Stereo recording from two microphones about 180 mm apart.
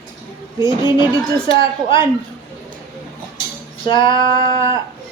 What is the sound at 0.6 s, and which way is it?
Speech, 25° left (ahead or behind).